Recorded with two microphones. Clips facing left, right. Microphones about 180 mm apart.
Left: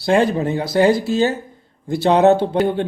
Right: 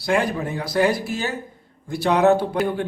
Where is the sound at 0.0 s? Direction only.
25° left (ahead or behind).